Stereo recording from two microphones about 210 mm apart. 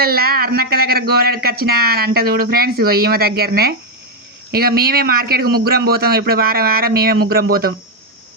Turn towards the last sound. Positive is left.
turn(degrees=-45)  # may be behind; listen again after turning